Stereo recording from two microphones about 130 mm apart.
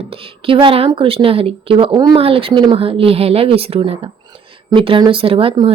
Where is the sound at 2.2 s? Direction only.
45° right (ahead or behind).